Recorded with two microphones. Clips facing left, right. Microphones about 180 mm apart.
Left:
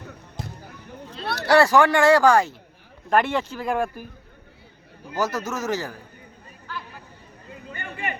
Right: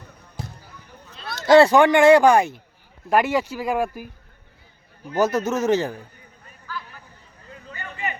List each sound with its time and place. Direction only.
1.0 s a sound: 30° left (ahead or behind)
1.4 s speech: 20° right (ahead or behind)
3.1 s speech: 5° right (ahead or behind)
5.1 s speech: 25° right (ahead or behind)